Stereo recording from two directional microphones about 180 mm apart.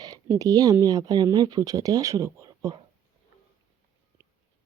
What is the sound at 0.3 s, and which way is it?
Speech, 20° right (ahead or behind).